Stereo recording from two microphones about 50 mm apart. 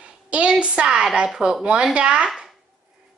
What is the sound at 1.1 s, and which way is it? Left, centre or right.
Speech, centre.